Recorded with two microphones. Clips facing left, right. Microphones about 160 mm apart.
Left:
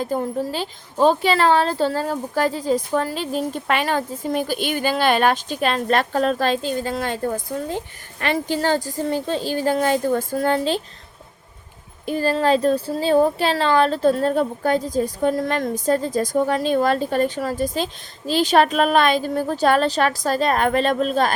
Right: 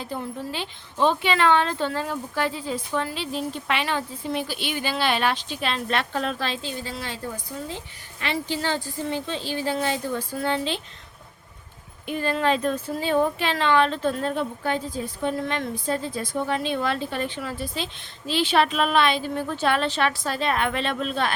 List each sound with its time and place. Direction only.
0.0 s a woman's voice: 45° left (ahead or behind)
12.0 s speech: 35° left (ahead or behind)